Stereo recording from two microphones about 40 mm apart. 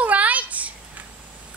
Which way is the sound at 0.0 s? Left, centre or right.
Right.